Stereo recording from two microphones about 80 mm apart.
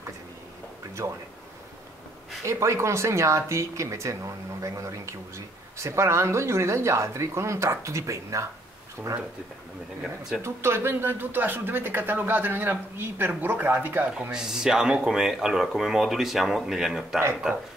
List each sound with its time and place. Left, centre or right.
1.0 s speech: right
2.4 s speech: right
10.4 s speech: right
14.3 s speech: centre